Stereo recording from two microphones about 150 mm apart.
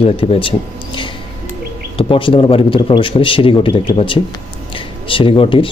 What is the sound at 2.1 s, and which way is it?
Speech, 35° left (ahead or behind).